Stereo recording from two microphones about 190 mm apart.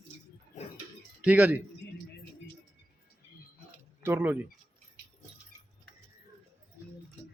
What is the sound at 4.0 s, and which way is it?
Speech, 10° right (ahead or behind).